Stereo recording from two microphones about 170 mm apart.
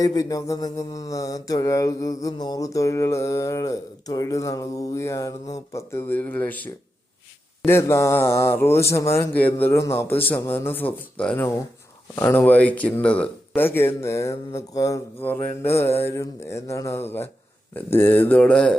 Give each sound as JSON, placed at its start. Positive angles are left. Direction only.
{"t": 0.0, "sound": "mantra", "side_deg": 20}
{"t": 5.5, "sound": "speech", "side_deg": 15}
{"t": 7.7, "sound": "speech", "side_deg": 15}